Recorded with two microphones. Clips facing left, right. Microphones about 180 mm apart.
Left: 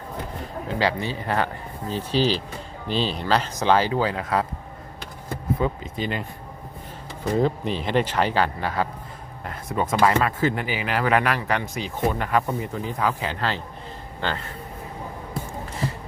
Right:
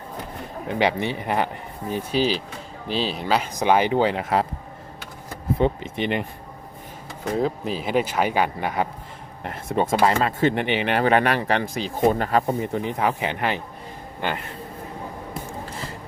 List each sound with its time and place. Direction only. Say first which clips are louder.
0.8 s speech: right 3 dB; 20° right (ahead or behind)
5.5 s speech: right 4 dB; 25° right (ahead or behind)
7.3 s speech: left 1 dB; centre (ahead or behind); by 12.8 s 35° right (ahead or behind)
12.8 s speech: right 2 dB; 20° right (ahead or behind)